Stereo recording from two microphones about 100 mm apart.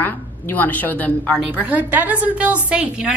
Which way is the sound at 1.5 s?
15° right (ahead or behind).